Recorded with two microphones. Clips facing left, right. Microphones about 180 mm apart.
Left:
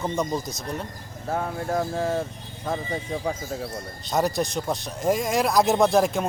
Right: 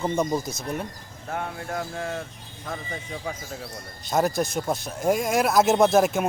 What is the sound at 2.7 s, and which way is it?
Speech, 30° left (ahead or behind).